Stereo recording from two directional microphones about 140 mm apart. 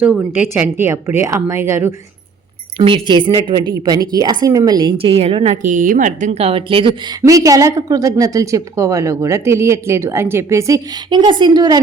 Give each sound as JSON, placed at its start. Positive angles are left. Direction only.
{"t": 0.0, "sound": "a woman's voice", "side_deg": -10}
{"t": 2.7, "sound": "a woman's voice", "side_deg": -40}
{"t": 5.1, "sound": "a woman's voice", "side_deg": -45}
{"t": 5.6, "sound": "speech", "side_deg": -70}
{"t": 7.2, "sound": "speech", "side_deg": -25}